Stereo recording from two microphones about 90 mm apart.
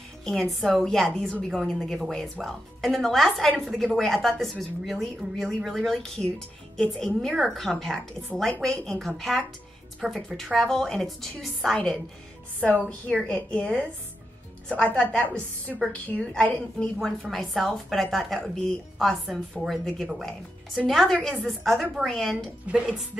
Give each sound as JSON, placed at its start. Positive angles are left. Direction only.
{"t": 0.2, "sound": "a woman's voice", "side_deg": 5}
{"t": 12.6, "sound": "a woman's voice", "side_deg": 15}
{"t": 17.0, "sound": "a woman's voice", "side_deg": 5}
{"t": 22.7, "sound": "speech", "side_deg": -10}